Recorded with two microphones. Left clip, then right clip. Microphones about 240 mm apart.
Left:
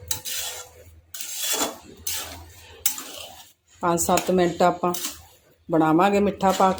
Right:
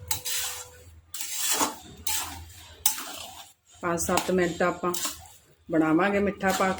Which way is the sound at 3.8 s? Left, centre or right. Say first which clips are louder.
Left 5 dB; centre.